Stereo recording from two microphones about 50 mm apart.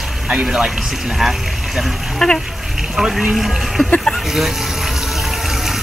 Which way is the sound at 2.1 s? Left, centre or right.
Centre.